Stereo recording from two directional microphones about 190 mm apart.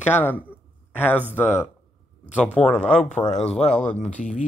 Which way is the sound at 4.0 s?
40° left (ahead or behind).